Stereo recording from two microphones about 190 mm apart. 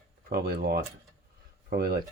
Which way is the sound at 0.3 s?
55° right (ahead or behind).